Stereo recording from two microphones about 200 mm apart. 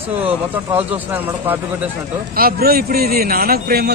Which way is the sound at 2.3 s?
50° right (ahead or behind).